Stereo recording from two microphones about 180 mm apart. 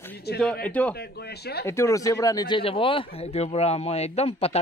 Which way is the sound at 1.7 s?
15° left (ahead or behind).